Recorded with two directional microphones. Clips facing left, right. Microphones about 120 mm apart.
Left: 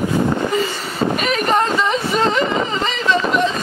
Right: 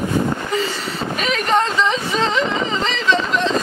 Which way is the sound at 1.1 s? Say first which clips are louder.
Right 1 dB; 5° left (ahead or behind).